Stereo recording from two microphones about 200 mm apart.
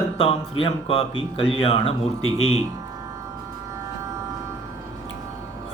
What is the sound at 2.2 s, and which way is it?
Speech, 90° left.